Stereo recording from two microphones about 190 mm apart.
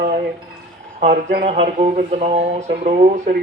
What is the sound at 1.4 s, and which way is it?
Speech, 35° right (ahead or behind).